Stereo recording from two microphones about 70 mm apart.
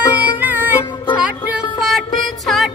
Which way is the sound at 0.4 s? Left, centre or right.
Right.